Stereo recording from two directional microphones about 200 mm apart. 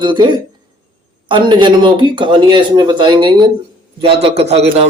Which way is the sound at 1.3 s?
25° right (ahead or behind).